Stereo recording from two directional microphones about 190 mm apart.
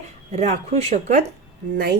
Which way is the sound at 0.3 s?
35° right (ahead or behind).